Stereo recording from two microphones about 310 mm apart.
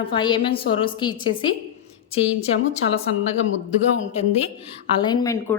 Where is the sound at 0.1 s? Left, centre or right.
Centre.